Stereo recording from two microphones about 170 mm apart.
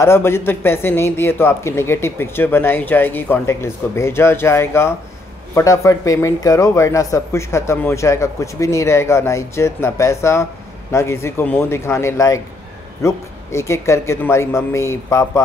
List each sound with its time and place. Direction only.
0.0 s a man's voice: 15° left (ahead or behind)